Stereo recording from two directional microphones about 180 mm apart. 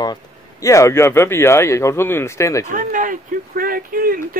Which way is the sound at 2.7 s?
50° right (ahead or behind).